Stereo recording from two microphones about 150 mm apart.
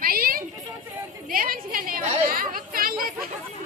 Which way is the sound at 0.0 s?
75° right (ahead or behind).